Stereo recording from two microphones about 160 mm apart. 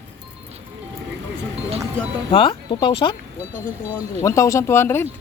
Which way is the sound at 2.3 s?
30° left (ahead or behind).